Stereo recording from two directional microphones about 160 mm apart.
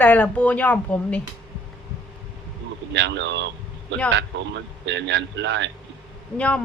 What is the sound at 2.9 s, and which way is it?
A man's voice, 90° right.